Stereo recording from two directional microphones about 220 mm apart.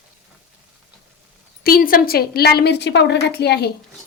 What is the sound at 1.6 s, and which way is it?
Speech, 40° left (ahead or behind).